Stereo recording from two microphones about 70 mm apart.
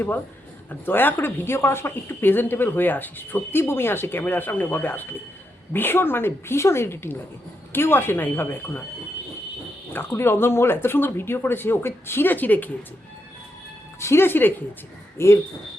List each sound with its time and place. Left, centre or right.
0.7 s speech: left
10.1 s speech: left
14.0 s speech: left